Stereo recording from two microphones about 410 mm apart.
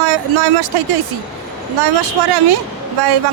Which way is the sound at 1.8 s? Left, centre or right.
Right.